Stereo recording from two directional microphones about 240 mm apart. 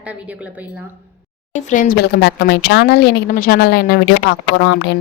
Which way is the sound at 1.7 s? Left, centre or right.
Left.